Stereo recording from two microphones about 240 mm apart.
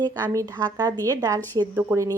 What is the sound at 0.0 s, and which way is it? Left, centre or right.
Speech, centre.